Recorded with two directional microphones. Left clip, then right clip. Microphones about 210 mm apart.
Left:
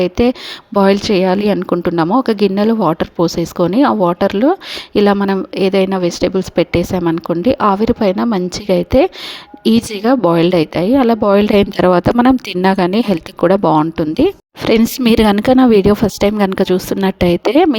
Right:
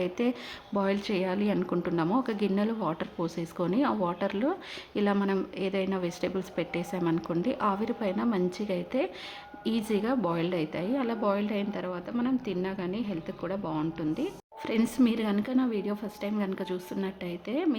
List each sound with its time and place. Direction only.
0.0 s a woman's voice: 40° left (ahead or behind)